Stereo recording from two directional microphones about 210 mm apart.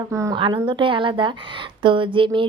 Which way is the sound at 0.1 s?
15° right (ahead or behind).